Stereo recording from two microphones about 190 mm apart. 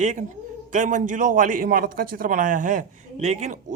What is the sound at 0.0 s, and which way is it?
A man's voice, 40° right (ahead or behind).